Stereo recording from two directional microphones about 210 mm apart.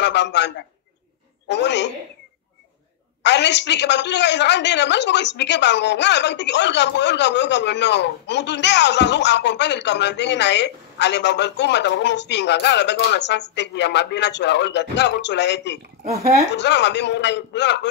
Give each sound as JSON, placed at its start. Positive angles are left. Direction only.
{"t": 0.0, "sound": "a woman's voice", "side_deg": 55}
{"t": 3.2, "sound": "a woman's voice", "side_deg": 55}
{"t": 16.0, "sound": "speech", "side_deg": -30}
{"t": 16.5, "sound": "a woman's voice", "side_deg": 55}